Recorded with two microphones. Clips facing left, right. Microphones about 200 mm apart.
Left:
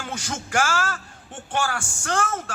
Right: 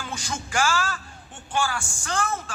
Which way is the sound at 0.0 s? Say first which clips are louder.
Left 2 dB; 65° left (ahead or behind).